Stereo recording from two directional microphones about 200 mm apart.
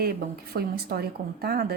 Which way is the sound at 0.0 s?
50° right (ahead or behind).